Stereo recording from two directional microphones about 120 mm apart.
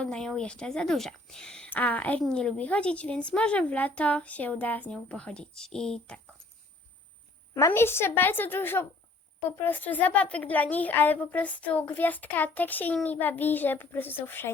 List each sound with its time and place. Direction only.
0.0 s speech: 5° left (ahead or behind)
7.5 s speech: 20° left (ahead or behind)